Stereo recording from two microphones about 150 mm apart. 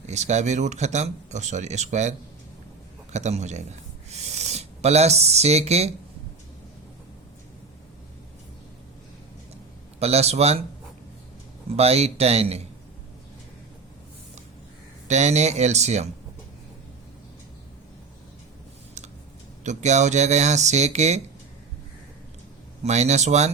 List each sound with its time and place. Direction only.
0.1 s speech: 50° right (ahead or behind)
10.0 s speech: 45° right (ahead or behind)
11.8 s speech: 45° right (ahead or behind)
15.0 s speech: 50° right (ahead or behind)
19.6 s speech: 50° right (ahead or behind)
22.8 s speech: 50° right (ahead or behind)